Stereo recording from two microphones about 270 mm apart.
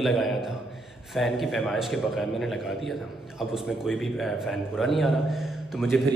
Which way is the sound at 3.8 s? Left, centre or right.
Centre.